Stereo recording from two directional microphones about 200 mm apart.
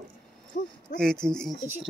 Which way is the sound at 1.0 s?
5° left (ahead or behind).